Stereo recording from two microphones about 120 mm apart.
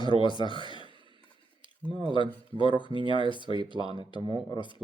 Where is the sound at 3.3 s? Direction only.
45° left (ahead or behind).